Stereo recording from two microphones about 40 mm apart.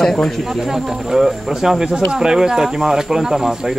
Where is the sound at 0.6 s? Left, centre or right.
Centre.